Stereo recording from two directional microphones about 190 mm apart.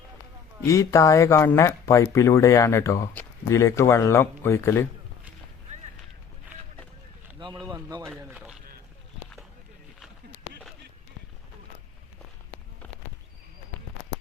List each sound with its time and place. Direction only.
0.7 s speech: 15° left (ahead or behind)
7.3 s a sound: 25° right (ahead or behind)
7.7 s speech: 20° right (ahead or behind)
8.1 s speech: 5° right (ahead or behind)